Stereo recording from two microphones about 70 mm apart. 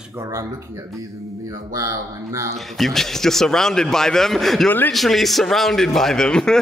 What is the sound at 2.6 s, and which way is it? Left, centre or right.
A man's voice, centre.